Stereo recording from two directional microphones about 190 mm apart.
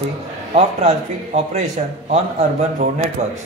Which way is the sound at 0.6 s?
35° right (ahead or behind).